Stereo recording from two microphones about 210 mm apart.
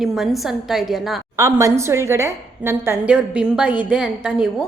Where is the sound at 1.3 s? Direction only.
15° right (ahead or behind).